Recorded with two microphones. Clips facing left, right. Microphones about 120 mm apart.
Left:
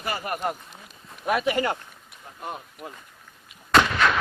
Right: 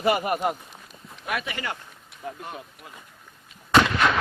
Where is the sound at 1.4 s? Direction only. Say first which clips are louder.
Left 9 dB; 35° left (ahead or behind).